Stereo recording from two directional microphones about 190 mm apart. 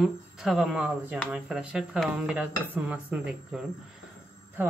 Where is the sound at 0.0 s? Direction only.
Centre (ahead or behind).